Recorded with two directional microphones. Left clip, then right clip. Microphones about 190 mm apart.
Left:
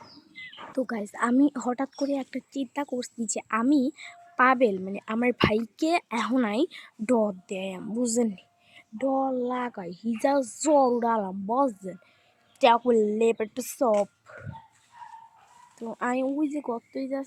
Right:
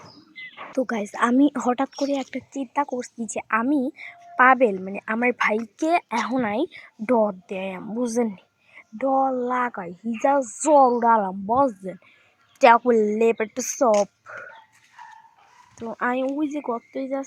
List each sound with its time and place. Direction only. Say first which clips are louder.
0.8 s speech: right 5 dB; 5° right (ahead or behind); by 10.6 s 10° left (ahead or behind)
10.7 s a woman's voice: right 6 dB; centre (ahead or behind)
15.8 s speech: right 4 dB; centre (ahead or behind)